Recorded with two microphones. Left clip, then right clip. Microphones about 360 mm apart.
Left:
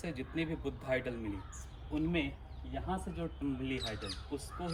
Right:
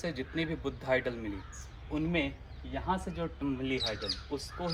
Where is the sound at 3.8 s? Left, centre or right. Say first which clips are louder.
Right 7 dB; left.